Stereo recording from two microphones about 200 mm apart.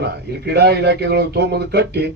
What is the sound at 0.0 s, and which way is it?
A man's voice, 55° right (ahead or behind).